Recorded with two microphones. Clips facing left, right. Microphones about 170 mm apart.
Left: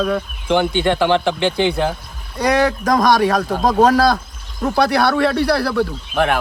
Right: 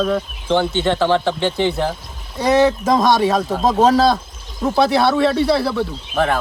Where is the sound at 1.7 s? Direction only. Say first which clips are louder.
Left 1 dB; centre (ahead or behind).